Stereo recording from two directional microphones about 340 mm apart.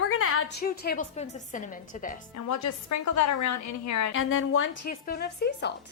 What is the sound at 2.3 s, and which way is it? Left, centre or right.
A woman's voice, left.